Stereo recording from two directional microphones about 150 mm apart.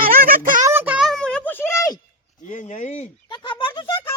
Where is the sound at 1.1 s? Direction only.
5° left (ahead or behind); by 2.4 s 25° left (ahead or behind).